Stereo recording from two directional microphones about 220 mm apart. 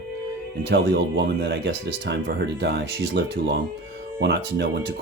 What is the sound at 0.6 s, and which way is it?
Speech, 55° right (ahead or behind).